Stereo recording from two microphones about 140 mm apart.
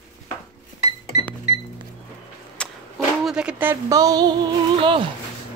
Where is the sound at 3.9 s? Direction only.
25° right (ahead or behind).